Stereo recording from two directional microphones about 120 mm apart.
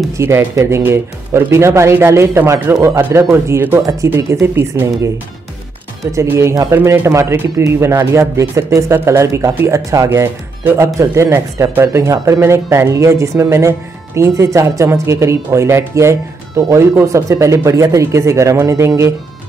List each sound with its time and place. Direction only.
0.2 s speech: 20° right (ahead or behind)
6.1 s speech: 20° right (ahead or behind)